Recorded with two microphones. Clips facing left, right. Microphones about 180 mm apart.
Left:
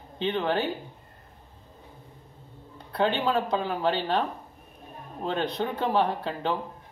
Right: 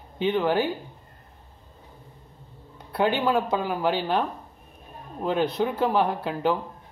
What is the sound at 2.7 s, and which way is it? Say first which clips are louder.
Speech: right 2 dB; 10° right (ahead or behind).